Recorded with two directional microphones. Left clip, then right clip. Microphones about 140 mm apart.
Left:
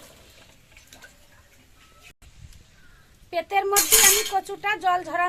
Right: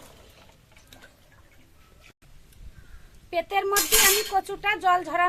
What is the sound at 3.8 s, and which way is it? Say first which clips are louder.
Speech: left 2 dB; 35° left (ahead or behind).